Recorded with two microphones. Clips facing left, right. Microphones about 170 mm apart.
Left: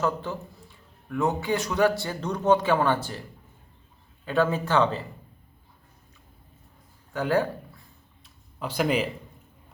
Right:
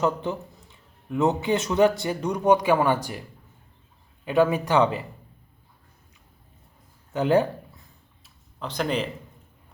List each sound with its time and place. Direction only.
0.0 s a man's voice: 20° right (ahead or behind)
4.3 s a man's voice: 15° right (ahead or behind)
7.1 s speech: 20° right (ahead or behind)
8.5 s speech: 10° left (ahead or behind)